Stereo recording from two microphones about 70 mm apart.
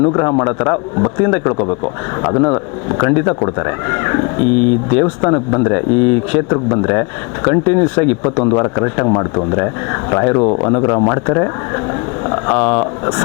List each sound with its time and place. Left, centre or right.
0.0 s speech: left
7.4 s speech: left